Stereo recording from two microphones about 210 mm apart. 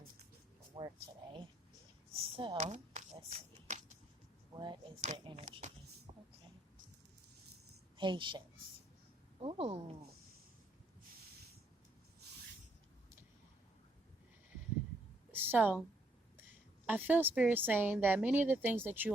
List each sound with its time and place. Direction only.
0.8 s speech: 20° right (ahead or behind)
3.7 s a sound: 35° right (ahead or behind)
4.6 s speech: 25° right (ahead or behind)
7.9 s a woman's voice: 20° right (ahead or behind)
9.4 s speech: 25° right (ahead or behind)
15.3 s a sound: 10° right (ahead or behind)
16.4 s a woman's voice: 10° right (ahead or behind)